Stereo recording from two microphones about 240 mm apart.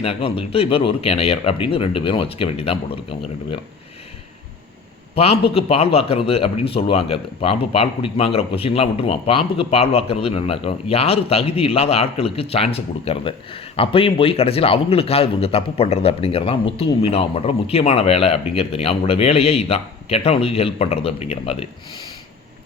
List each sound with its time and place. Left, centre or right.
0.0 s a man's voice: left
5.1 s a man's voice: left